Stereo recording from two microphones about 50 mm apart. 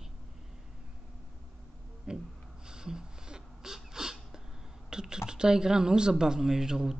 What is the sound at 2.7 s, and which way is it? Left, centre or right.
Sneeze, centre.